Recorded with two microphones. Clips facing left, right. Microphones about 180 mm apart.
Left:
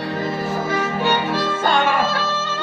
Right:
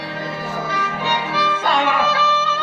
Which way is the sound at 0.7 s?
50° left (ahead or behind).